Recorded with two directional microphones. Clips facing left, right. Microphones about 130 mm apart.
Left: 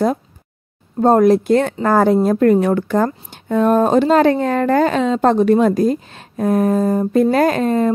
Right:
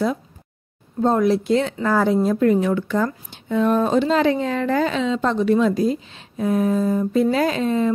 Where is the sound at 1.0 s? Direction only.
50° left (ahead or behind).